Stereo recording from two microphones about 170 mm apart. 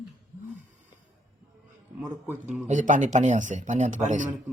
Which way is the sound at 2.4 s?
45° right (ahead or behind).